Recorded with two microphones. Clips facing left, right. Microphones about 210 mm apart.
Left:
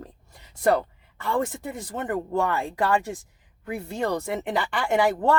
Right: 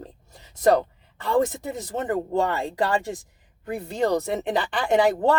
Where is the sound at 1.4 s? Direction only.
20° right (ahead or behind).